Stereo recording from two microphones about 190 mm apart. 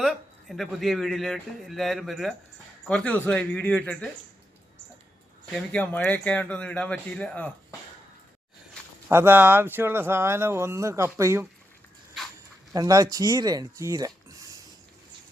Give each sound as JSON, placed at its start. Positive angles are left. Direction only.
{"t": 0.0, "sound": "a man's voice", "side_deg": 0}
{"t": 5.5, "sound": "a man's voice", "side_deg": 5}
{"t": 9.0, "sound": "speech", "side_deg": -10}
{"t": 12.7, "sound": "speech", "side_deg": -20}